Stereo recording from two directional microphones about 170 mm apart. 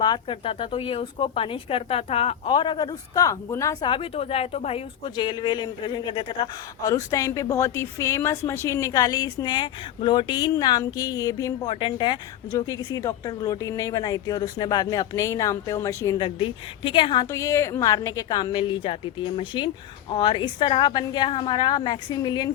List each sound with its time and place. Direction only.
0.0 s speech: 30° left (ahead or behind)
3.8 s a woman's voice: 30° left (ahead or behind)